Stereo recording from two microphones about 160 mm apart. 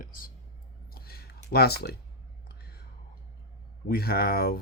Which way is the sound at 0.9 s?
75° left (ahead or behind).